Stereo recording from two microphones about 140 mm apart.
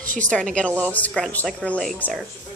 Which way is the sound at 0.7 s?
15° right (ahead or behind).